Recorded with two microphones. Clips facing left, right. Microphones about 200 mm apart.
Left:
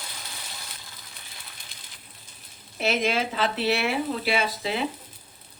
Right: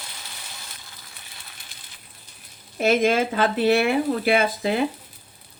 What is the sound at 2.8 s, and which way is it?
Speech, 50° right (ahead or behind).